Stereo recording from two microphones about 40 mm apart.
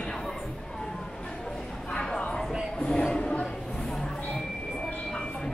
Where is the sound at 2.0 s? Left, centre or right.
Centre.